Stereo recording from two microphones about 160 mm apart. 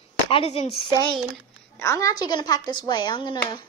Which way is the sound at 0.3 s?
35° left (ahead or behind).